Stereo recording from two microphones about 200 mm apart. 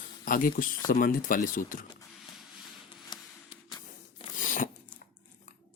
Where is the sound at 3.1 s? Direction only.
25° left (ahead or behind).